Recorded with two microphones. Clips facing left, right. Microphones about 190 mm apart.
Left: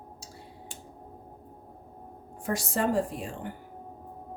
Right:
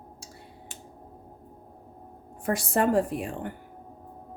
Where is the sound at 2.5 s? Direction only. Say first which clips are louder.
Right 4 dB; 55° right (ahead or behind).